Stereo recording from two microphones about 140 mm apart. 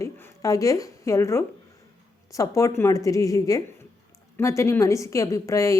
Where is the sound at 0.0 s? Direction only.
20° left (ahead or behind).